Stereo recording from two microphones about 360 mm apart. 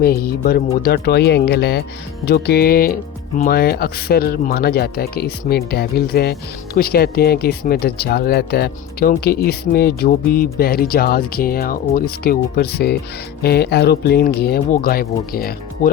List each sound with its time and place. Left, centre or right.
0.0 s speech: left